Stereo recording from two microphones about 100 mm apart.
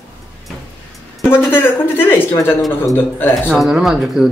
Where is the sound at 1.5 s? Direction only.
20° left (ahead or behind).